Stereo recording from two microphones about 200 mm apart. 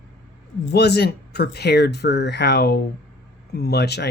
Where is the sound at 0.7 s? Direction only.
55° left (ahead or behind).